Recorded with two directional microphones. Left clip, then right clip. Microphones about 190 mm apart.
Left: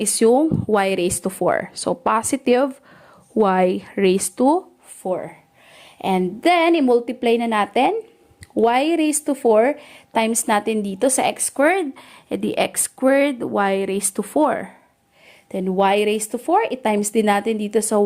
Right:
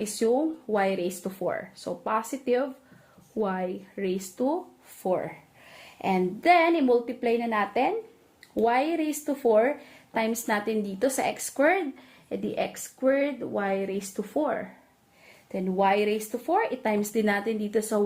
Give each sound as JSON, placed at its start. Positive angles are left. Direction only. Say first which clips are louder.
{"t": 0.0, "sound": "speech", "louder": "left 9 dB", "side_deg": 60}
{"t": 5.0, "sound": "speech", "louder": "left 3 dB", "side_deg": 25}
{"t": 6.0, "sound": "a woman's voice", "louder": "left 6 dB", "side_deg": 40}